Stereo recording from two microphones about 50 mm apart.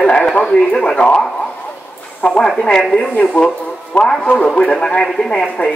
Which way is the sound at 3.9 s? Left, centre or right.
Left.